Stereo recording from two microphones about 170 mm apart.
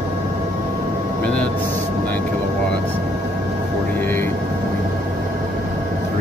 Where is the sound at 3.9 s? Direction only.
10° left (ahead or behind).